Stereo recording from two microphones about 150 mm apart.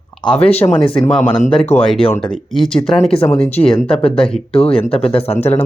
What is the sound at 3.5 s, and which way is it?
Speech, 40° left (ahead or behind).